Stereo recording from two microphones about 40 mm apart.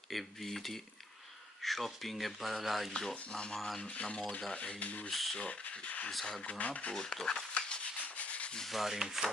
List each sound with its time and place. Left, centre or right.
0.1 s speech: centre
4.5 s a sound: left
4.7 s speech: left
5.1 s speech: centre
5.4 s speech: left
6.9 s speech: centre
7.5 s rub: left
8.7 s a sound: centre